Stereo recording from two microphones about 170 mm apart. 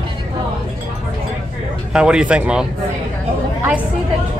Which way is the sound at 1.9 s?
5° right (ahead or behind).